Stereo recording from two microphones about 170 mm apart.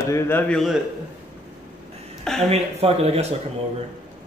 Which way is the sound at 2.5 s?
35° right (ahead or behind).